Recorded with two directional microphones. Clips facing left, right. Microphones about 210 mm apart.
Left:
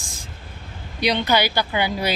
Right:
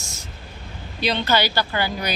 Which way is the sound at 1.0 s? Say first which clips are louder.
Left 1 dB; 15° left (ahead or behind).